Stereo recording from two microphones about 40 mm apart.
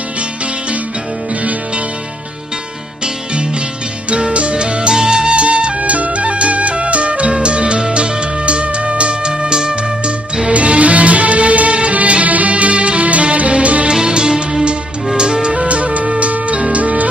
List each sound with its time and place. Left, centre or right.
4.2 s music: right
10.5 s music: right
13.8 s music: right